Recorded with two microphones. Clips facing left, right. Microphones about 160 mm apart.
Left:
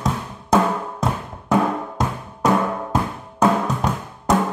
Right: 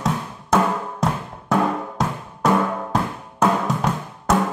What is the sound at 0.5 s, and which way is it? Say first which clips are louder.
Drum: left 1 dB; centre (ahead or behind).